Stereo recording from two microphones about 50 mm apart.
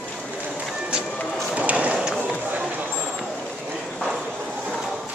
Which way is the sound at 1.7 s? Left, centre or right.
Right.